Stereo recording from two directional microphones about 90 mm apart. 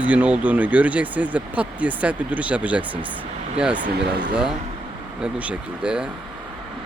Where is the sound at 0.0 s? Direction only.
15° right (ahead or behind).